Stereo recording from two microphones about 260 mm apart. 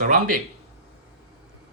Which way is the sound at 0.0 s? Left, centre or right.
Right.